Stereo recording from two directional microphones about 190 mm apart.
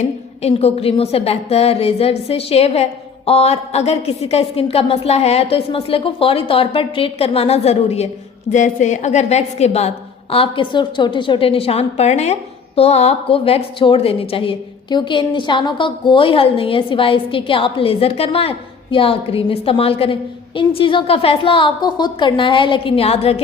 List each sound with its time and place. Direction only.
0.4 s a woman's voice: 30° left (ahead or behind)